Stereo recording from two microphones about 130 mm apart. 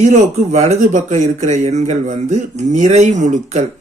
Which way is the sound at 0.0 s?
60° right (ahead or behind).